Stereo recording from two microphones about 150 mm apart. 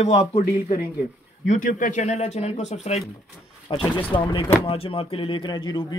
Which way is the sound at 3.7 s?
30° left (ahead or behind).